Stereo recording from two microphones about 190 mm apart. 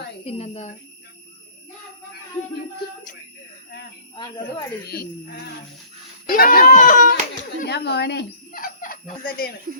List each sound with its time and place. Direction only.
0.3 s speech: 35° left (ahead or behind)
4.1 s speech: 25° left (ahead or behind)
6.2 s speech: 50° left (ahead or behind)
7.6 s speech: 60° left (ahead or behind)